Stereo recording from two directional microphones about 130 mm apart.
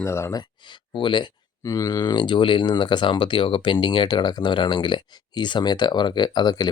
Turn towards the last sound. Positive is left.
turn(degrees=30)  # may be behind; listen again after turning